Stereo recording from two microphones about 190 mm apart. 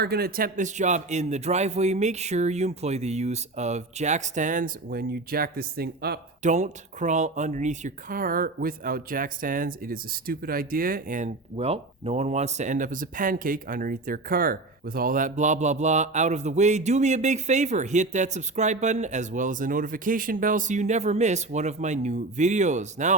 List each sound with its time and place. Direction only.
0.0 s speech: 55° right (ahead or behind)
6.4 s speech: 40° right (ahead or behind)